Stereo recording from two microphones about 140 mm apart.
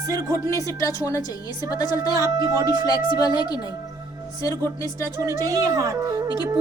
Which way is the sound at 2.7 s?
30° left (ahead or behind).